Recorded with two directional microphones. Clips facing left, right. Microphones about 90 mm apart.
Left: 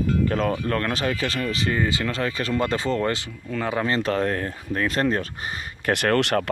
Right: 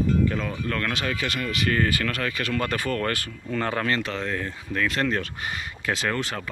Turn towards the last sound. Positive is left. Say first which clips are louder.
# left 7 dB
turn(degrees=65)  # may be behind; listen again after turning